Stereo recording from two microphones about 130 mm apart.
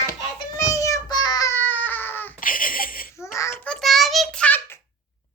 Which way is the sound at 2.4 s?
90° left.